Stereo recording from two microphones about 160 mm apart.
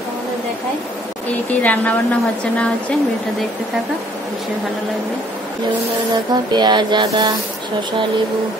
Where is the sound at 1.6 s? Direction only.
10° left (ahead or behind).